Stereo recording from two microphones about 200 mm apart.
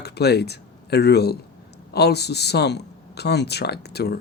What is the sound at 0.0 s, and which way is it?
Speech, 55° left (ahead or behind).